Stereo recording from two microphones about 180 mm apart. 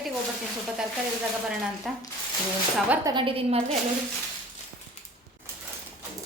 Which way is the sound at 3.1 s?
25° right (ahead or behind).